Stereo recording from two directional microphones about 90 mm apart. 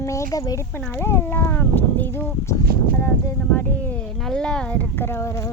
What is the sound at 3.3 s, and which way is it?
Speech, 20° left (ahead or behind).